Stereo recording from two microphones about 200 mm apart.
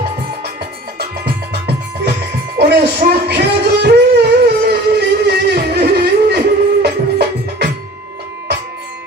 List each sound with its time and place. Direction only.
0.9 s music: 55° right (ahead or behind)
2.6 s a sound: 55° right (ahead or behind)
6.8 s music: 55° right (ahead or behind)